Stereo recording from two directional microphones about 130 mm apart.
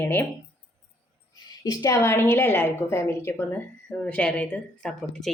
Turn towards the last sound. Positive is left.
turn(degrees=5)  # may be behind; listen again after turning